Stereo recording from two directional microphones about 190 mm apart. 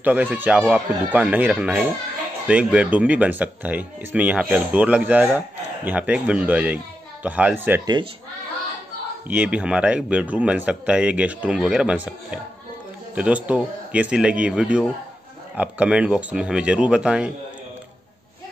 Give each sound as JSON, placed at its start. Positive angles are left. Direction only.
{"t": 0.0, "sound": "speech", "side_deg": -10}
{"t": 7.8, "sound": "speech", "side_deg": -20}
{"t": 9.3, "sound": "speech", "side_deg": -5}
{"t": 13.1, "sound": "speech", "side_deg": -5}